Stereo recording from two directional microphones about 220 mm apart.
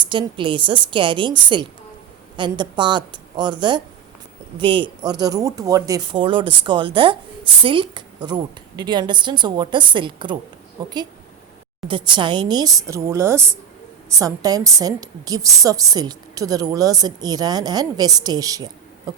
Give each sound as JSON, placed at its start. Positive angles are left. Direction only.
{"t": 0.0, "sound": "a woman's voice", "side_deg": -20}